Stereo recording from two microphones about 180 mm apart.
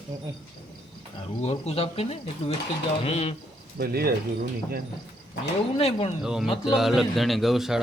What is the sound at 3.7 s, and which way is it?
Speech, 60° right (ahead or behind).